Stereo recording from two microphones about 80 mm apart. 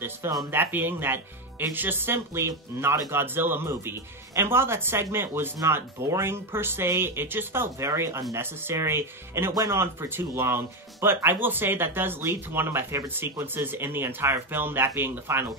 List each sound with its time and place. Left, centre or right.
0.5 s speech: right